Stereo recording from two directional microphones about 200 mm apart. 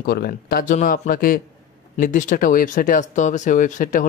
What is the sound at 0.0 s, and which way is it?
Speech, 50° left (ahead or behind).